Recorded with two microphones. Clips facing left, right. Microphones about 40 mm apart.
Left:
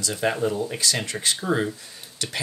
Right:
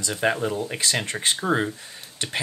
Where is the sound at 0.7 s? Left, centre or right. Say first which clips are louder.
Right 1 dB; right.